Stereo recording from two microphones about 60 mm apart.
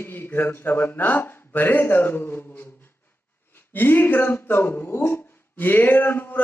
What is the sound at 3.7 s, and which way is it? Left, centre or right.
Speech, left.